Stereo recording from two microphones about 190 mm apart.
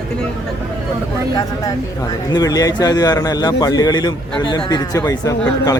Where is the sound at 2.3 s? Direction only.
20° left (ahead or behind).